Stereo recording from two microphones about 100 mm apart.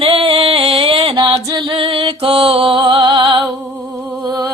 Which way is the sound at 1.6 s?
55° right (ahead or behind).